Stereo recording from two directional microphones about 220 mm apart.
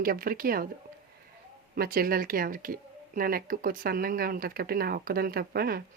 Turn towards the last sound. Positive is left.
turn(degrees=-45)  # may be behind; listen again after turning